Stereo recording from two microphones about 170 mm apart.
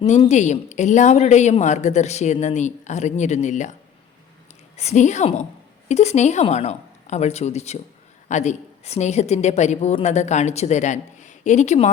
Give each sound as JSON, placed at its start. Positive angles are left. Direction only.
{"t": 0.0, "sound": "a man's voice", "side_deg": 40}
{"t": 4.8, "sound": "a woman's voice", "side_deg": 40}